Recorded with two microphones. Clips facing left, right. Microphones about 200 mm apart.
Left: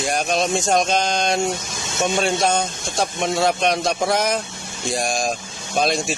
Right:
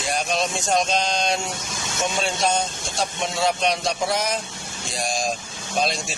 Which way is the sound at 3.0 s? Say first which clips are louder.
Left 4 dB; 50° left (ahead or behind).